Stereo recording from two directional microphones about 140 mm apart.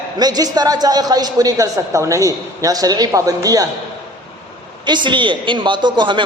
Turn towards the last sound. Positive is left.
turn(degrees=-35)  # may be behind; listen again after turning